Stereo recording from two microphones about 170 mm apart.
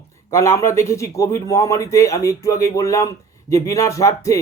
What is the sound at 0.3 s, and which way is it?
Speech, 15° left (ahead or behind).